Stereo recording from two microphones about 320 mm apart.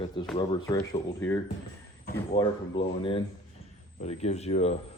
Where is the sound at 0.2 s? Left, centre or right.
Centre.